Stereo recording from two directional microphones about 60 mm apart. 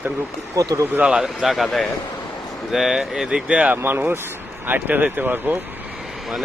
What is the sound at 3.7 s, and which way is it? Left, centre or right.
Speech, right.